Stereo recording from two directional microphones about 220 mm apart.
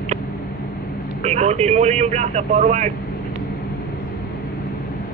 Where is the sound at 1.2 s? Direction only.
30° right (ahead or behind).